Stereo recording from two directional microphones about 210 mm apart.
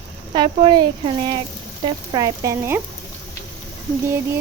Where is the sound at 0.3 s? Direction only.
20° right (ahead or behind).